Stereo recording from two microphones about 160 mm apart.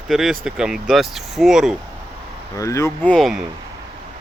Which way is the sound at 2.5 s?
20° left (ahead or behind).